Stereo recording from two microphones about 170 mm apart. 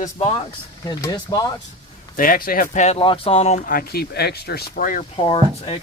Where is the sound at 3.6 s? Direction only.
60° left (ahead or behind).